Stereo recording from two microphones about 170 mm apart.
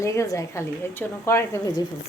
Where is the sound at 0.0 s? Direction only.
15° left (ahead or behind).